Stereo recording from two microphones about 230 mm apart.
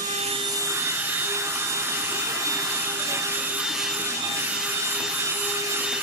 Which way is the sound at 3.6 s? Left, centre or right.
Centre.